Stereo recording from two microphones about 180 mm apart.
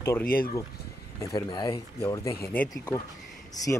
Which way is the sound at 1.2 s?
20° left (ahead or behind).